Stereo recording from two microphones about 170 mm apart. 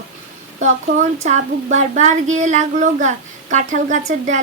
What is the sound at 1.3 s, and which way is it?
Speech, 45° right (ahead or behind).